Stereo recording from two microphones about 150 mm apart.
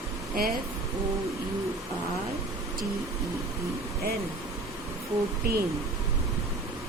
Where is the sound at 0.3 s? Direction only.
80° right.